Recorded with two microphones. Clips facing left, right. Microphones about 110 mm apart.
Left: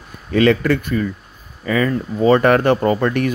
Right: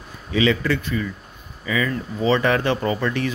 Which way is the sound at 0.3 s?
55° left (ahead or behind).